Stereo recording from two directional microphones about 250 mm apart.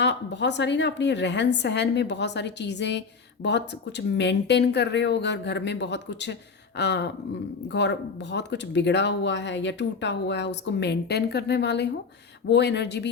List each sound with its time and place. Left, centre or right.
0.0 s speech: left